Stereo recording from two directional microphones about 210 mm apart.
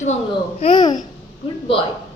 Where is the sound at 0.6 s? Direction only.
25° left (ahead or behind).